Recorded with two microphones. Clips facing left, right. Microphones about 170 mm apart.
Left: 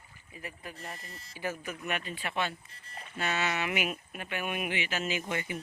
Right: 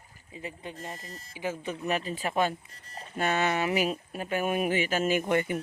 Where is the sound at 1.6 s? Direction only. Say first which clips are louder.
Right 6 dB; 30° right (ahead or behind); by 3.6 s 50° right (ahead or behind).